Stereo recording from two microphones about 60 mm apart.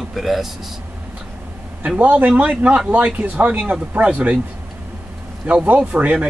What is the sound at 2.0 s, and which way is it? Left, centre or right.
Speech, right.